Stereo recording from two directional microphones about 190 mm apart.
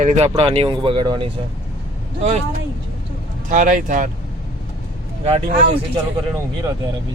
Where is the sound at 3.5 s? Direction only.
45° right (ahead or behind).